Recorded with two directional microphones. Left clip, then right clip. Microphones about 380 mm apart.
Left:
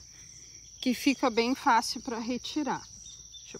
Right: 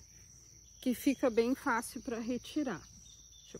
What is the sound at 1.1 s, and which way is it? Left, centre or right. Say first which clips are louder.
Speech: left 3 dB; centre.